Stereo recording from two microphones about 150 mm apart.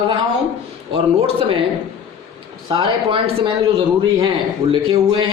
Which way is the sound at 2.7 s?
35° right (ahead or behind).